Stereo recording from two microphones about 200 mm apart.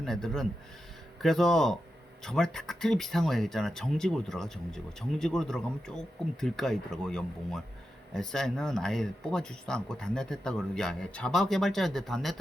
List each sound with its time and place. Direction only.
0.0 s speech: centre (ahead or behind)